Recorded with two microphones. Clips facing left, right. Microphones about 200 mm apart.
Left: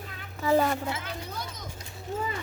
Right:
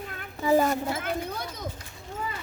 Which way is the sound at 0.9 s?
55° right (ahead or behind).